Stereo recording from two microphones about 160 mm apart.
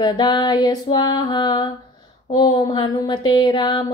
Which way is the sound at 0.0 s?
25° left (ahead or behind).